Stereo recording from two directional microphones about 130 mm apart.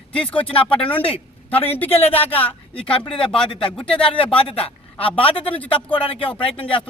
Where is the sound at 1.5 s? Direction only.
15° left (ahead or behind).